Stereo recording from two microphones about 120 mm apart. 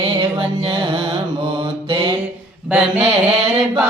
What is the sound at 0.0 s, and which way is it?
Music, 45° right (ahead or behind).